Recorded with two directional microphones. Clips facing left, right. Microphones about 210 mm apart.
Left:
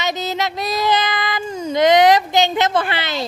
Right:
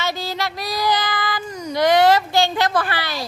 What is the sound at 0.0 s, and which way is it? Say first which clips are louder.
Child singing: left 3 dB; 20° left (ahead or behind).